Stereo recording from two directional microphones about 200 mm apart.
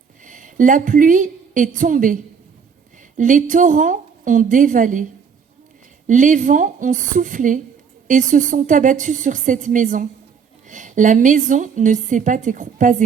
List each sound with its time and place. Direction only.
0.3 s a woman's voice: 40° right (ahead or behind)
3.2 s a woman's voice: 40° right (ahead or behind)
6.1 s a woman's voice: 40° right (ahead or behind)